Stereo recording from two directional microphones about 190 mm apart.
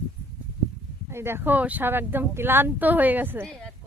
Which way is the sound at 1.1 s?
10° right (ahead or behind).